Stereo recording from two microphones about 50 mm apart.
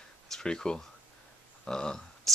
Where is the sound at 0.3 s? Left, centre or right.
Centre.